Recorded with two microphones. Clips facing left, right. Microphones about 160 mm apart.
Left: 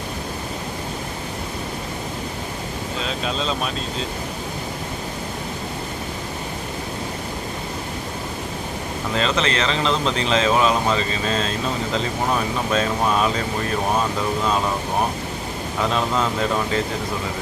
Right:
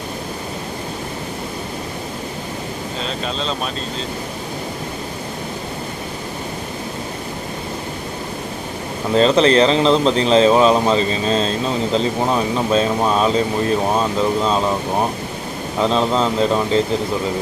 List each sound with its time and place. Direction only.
9.1 s speech: 35° right (ahead or behind)
13.2 s speech: 30° right (ahead or behind)
15.8 s speech: 30° right (ahead or behind)